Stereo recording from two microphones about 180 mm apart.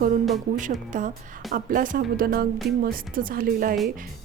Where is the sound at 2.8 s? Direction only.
50° right (ahead or behind).